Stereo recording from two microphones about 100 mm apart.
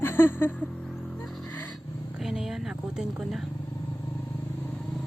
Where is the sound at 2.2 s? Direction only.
5° right (ahead or behind).